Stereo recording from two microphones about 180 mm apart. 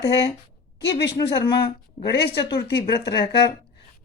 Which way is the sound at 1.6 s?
70° left (ahead or behind).